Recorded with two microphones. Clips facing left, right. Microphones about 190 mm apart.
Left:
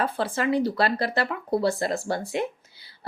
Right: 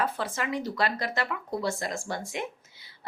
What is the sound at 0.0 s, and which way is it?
Speech, 30° left (ahead or behind).